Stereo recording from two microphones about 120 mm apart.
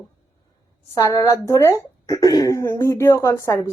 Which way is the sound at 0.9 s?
25° left (ahead or behind).